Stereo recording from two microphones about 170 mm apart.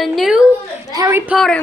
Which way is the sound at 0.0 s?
Centre (ahead or behind).